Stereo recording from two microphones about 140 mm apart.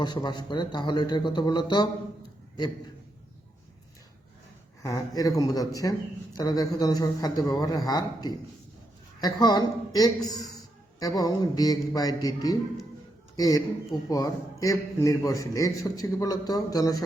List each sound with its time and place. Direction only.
0.0 s a man's voice: 30° left (ahead or behind)
4.8 s a man's voice: 25° left (ahead or behind)